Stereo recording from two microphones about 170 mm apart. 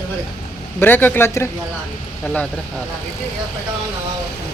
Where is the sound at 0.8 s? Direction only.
10° left (ahead or behind).